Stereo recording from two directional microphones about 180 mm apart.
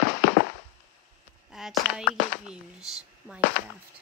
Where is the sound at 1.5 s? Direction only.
5° right (ahead or behind).